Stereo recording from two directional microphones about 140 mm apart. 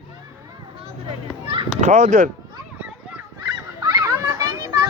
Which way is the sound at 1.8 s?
60° right (ahead or behind).